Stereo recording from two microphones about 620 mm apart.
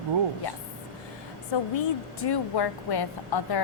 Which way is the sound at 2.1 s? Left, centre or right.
Left.